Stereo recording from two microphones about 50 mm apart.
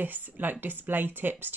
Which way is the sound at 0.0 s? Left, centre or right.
Right.